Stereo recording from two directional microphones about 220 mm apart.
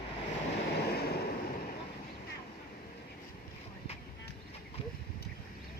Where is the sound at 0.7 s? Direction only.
45° left (ahead or behind).